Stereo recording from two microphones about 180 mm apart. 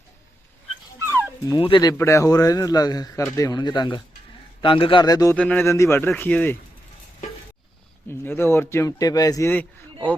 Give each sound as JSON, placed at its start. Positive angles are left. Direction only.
{"t": 1.5, "sound": "speech", "side_deg": 25}
{"t": 5.4, "sound": "speech", "side_deg": 5}
{"t": 8.0, "sound": "speech", "side_deg": 10}